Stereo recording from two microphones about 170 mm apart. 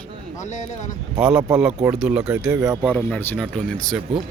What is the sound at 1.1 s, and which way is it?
Speech, 5° right (ahead or behind).